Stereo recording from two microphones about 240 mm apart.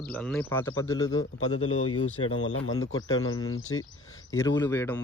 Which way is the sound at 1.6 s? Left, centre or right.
Left.